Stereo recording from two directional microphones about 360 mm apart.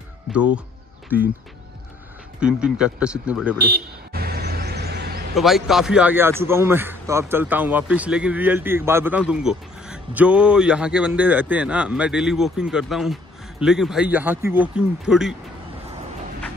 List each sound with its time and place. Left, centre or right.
0.3 s music: centre
1.1 s a man's voice: centre
2.4 s a man's voice: centre
3.6 s vehicle: right
5.3 s a man's voice: centre